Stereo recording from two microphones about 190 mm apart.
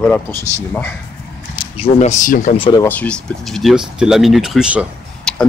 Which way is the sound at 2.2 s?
45° left (ahead or behind).